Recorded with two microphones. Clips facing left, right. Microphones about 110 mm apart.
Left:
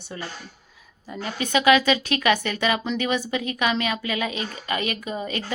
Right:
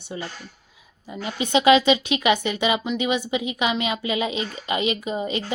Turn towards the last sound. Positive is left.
turn(degrees=-20)  # may be behind; listen again after turning